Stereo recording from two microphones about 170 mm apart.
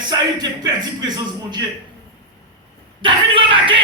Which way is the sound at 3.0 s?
30° right (ahead or behind).